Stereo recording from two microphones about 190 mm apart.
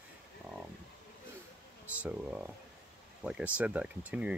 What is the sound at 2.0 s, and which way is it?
Speech, 5° right (ahead or behind).